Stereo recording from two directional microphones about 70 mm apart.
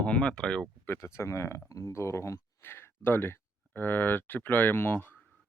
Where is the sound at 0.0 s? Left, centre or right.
Centre.